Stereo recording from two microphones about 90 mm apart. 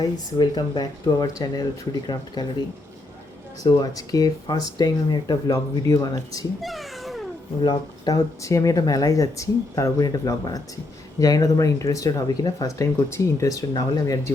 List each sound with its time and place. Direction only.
0.0 s speech: 50° left (ahead or behind)
3.6 s speech: 45° left (ahead or behind)
5.7 s speech: 45° left (ahead or behind)
6.6 s cat: centre (ahead or behind)
7.6 s speech: 50° left (ahead or behind)
8.4 s speech: 35° left (ahead or behind)